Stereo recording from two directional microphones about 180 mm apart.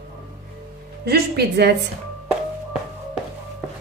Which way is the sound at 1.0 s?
65° right (ahead or behind).